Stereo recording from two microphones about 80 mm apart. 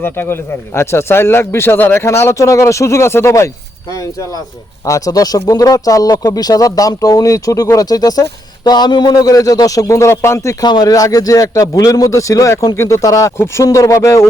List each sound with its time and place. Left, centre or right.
0.0 s speech: left
2.0 s speech: left
4.9 s speech: left
8.6 s speech: left
10.6 s speech: left